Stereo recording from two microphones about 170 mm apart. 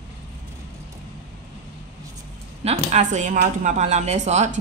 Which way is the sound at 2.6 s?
40° right (ahead or behind).